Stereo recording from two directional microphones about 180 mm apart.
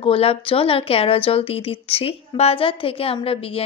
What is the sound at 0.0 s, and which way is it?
A woman's voice, 30° left (ahead or behind).